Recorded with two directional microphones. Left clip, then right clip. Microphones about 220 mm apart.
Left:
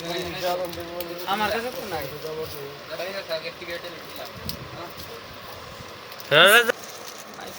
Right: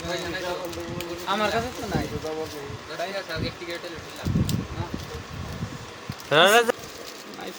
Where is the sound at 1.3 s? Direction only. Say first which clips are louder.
Even; 30° right (ahead or behind).